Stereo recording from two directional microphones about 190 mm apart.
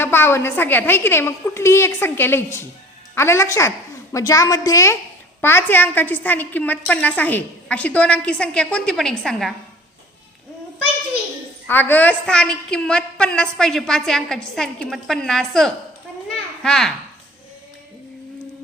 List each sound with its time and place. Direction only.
0.0 s a woman's voice: 10° left (ahead or behind)
11.7 s a woman's voice: 10° left (ahead or behind)